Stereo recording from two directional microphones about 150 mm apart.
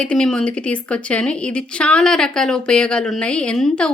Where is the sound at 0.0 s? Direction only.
5° left (ahead or behind).